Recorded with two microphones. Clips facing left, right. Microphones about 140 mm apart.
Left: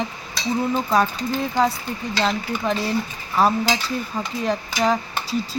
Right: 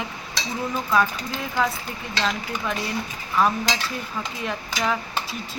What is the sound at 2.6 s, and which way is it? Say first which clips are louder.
Speech: left 6 dB; 35° left (ahead or behind).